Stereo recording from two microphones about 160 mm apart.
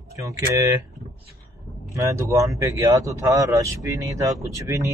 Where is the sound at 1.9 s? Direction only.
20° right (ahead or behind).